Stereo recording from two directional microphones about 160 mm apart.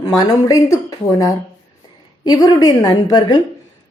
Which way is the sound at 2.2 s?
25° left (ahead or behind).